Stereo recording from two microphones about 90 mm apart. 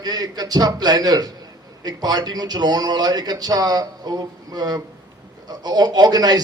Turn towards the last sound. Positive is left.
turn(degrees=-50)  # may be behind; listen again after turning